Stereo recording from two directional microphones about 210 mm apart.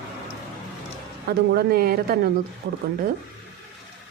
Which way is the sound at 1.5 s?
50° right (ahead or behind).